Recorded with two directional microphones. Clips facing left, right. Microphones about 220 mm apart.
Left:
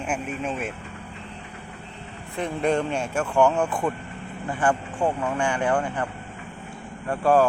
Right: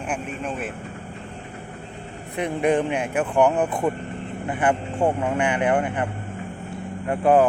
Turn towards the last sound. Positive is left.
turn(degrees=-20)  # may be behind; listen again after turning